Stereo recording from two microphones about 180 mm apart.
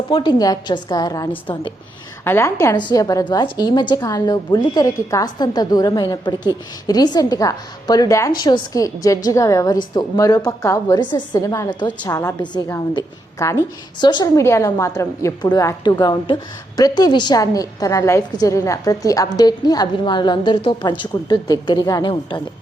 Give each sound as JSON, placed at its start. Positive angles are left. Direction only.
{"t": 0.1, "sound": "a woman's voice", "side_deg": 25}
{"t": 2.2, "sound": "a woman's voice", "side_deg": 15}